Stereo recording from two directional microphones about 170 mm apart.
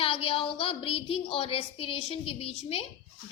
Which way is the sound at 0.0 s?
35° left (ahead or behind).